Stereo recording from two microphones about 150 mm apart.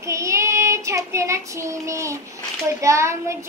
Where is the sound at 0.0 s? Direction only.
20° right (ahead or behind).